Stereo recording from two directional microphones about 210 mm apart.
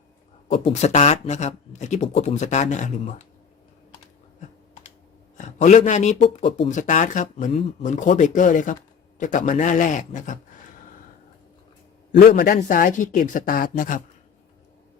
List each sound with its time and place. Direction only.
0.4 s speech: 30° left (ahead or behind)
5.4 s a man's voice: 35° left (ahead or behind)
12.1 s speech: 45° left (ahead or behind)